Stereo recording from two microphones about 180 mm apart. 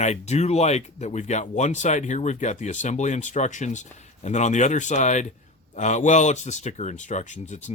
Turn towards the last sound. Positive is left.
turn(degrees=40)  # may be behind; listen again after turning